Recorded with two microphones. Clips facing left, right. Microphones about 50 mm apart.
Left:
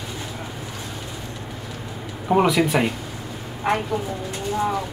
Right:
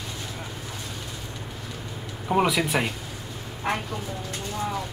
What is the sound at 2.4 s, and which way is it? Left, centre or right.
Speech, centre.